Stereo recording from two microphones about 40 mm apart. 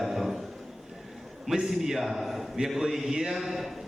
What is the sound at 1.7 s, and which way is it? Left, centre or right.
A man's voice, centre.